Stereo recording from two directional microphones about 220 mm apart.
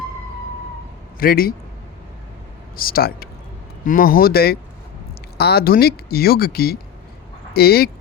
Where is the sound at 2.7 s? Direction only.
40° left (ahead or behind).